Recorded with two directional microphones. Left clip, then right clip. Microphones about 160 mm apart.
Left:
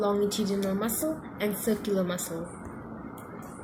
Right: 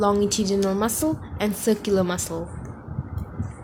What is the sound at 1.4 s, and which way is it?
Speech, 65° right (ahead or behind).